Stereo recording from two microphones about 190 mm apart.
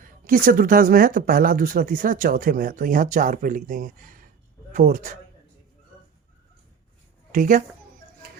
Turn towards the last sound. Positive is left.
turn(degrees=-45)  # may be behind; listen again after turning